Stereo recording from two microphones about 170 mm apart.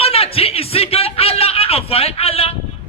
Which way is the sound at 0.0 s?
35° left (ahead or behind).